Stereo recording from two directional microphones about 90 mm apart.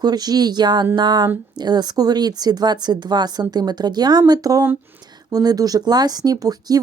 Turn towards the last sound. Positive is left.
turn(degrees=-45)  # may be behind; listen again after turning